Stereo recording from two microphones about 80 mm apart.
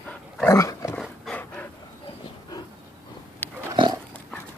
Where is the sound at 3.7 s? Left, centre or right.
Right.